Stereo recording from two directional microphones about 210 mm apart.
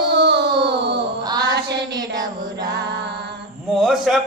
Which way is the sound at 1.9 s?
20° right (ahead or behind).